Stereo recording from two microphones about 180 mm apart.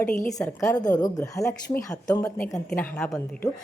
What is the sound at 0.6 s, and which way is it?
A woman's voice, 20° left (ahead or behind).